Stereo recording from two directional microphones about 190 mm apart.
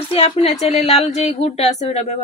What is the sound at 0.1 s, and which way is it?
Speech, 30° left (ahead or behind).